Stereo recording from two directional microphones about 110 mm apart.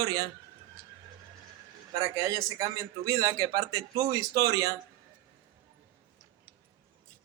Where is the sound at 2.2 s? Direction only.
35° right (ahead or behind).